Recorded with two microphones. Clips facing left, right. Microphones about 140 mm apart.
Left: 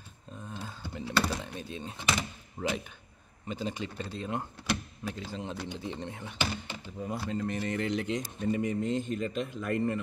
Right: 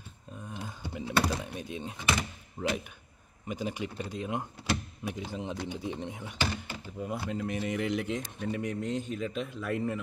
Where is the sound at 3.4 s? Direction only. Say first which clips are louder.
Right 1 dB; 10° right (ahead or behind).